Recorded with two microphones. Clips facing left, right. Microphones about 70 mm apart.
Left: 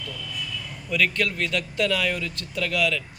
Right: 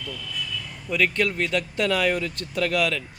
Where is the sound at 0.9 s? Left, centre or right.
Right.